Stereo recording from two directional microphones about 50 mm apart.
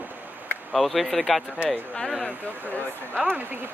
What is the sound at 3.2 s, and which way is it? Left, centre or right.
Speech, right.